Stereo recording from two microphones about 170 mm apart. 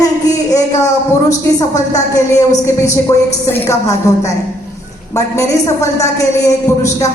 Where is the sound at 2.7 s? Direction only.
15° left (ahead or behind).